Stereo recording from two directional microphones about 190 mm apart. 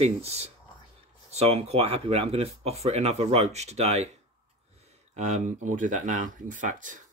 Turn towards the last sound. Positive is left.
turn(degrees=-40)  # may be behind; listen again after turning